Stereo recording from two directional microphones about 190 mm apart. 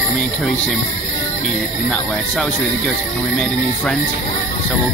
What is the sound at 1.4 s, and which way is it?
Speech, 5° left (ahead or behind).